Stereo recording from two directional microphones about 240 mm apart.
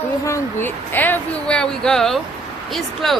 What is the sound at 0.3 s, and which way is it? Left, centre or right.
Speech, centre.